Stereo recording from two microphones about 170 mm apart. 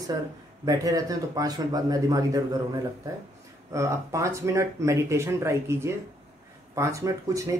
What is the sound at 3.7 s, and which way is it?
Speech, 20° right (ahead or behind).